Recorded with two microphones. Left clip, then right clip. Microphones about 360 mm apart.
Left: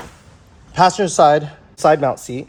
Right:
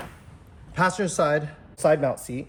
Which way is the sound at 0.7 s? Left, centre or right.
Centre.